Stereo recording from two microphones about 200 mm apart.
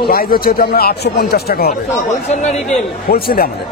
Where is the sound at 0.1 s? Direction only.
50° left (ahead or behind).